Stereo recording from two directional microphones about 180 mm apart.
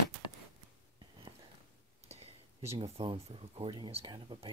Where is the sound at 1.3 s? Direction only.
30° right (ahead or behind).